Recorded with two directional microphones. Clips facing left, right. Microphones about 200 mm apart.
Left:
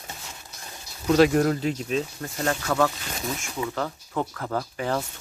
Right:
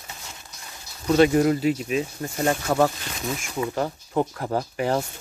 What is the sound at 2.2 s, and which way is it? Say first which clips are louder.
Speech: right 3 dB; 20° right (ahead or behind).